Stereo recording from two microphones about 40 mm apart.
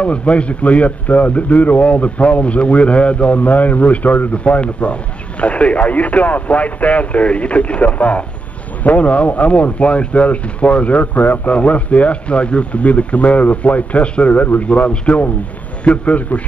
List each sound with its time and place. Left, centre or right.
0.0 s a man's voice: left
14.7 s a man's voice: left